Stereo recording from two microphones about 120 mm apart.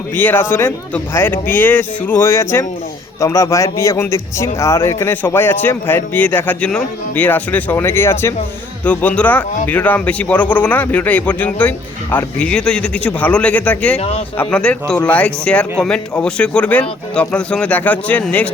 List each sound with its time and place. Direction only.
0.2 s a man's voice: 15° left (ahead or behind)